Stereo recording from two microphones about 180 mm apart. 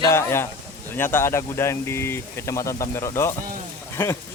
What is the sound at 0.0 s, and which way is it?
Speech, 15° left (ahead or behind).